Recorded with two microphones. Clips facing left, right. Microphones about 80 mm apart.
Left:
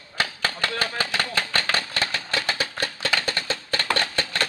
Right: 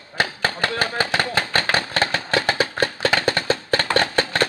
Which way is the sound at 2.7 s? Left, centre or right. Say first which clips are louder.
Right 7 dB; right.